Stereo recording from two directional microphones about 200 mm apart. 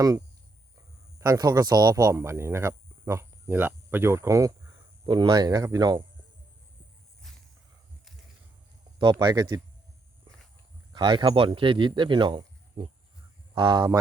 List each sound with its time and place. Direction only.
1.2 s speech: 20° right (ahead or behind)
7.2 s a sound: centre (ahead or behind)
9.0 s speech: 20° right (ahead or behind)
10.9 s speech: 25° right (ahead or behind)